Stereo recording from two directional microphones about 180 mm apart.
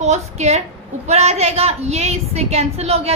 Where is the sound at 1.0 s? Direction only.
35° right (ahead or behind).